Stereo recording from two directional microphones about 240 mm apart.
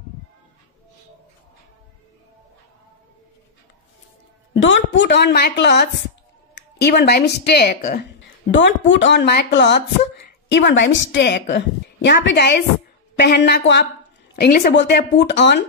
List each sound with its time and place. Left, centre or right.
4.6 s a woman's voice: left